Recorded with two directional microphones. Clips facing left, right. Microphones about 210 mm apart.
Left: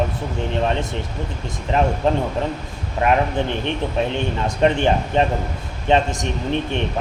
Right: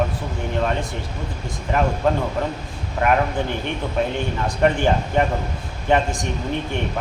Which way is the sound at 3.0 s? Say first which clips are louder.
Left 1 dB; 20° left (ahead or behind).